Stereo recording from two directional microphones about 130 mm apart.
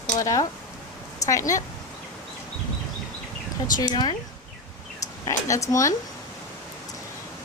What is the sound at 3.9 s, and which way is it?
Speech, 35° left (ahead or behind).